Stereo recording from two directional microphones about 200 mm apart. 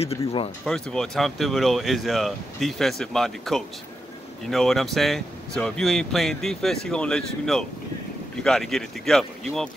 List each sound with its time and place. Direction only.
0.0 s speech: 30° left (ahead or behind)
0.7 s speech: 5° left (ahead or behind)